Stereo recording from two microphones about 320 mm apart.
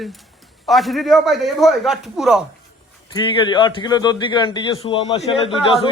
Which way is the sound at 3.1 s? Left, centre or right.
Centre.